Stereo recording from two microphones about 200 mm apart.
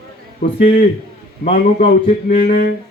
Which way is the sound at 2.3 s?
45° left (ahead or behind).